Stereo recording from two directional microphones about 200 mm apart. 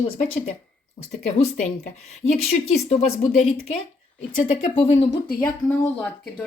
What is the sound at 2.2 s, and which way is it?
Speech, 90° left.